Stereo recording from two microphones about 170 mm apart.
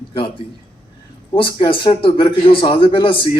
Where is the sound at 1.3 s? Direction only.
30° left (ahead or behind).